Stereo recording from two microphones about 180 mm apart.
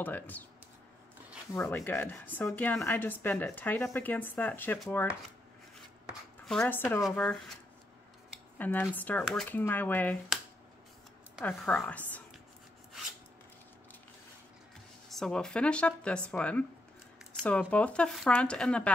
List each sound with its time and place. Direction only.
0.0 s speech: 10° left (ahead or behind)
1.5 s speech: 10° left (ahead or behind)
6.4 s speech: 5° left (ahead or behind)
8.5 s speech: 10° left (ahead or behind)
11.4 s speech: 5° left (ahead or behind)
15.0 s speech: centre (ahead or behind)